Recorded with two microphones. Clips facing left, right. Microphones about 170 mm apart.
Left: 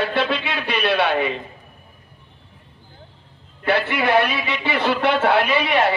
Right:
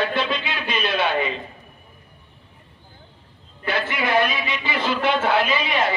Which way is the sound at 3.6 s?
65° left (ahead or behind).